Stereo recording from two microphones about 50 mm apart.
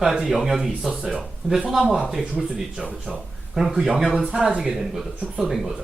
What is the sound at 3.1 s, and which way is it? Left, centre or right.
Speech, centre.